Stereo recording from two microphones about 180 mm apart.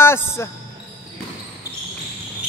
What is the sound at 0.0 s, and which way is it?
Music, 15° left (ahead or behind).